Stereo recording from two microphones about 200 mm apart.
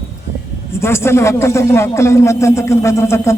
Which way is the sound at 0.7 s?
10° left (ahead or behind).